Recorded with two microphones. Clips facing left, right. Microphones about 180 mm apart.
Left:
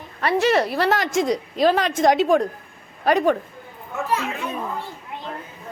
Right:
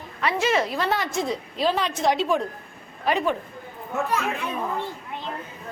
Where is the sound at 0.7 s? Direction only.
80° left.